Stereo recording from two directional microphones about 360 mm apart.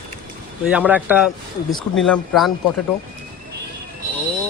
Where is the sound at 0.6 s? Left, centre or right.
Centre.